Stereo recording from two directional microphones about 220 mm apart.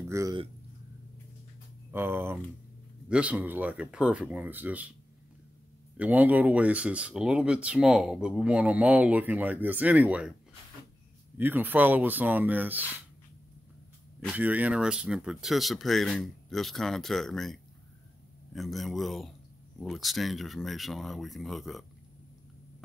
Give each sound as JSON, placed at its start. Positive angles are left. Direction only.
{"t": 0.1, "sound": "speech", "side_deg": -15}
{"t": 1.9, "sound": "speech", "side_deg": -10}
{"t": 5.9, "sound": "speech", "side_deg": -5}
{"t": 11.3, "sound": "speech", "side_deg": -10}
{"t": 14.3, "sound": "speech", "side_deg": -5}